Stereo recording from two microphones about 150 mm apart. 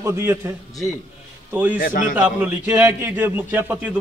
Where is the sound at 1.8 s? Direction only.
65° left (ahead or behind).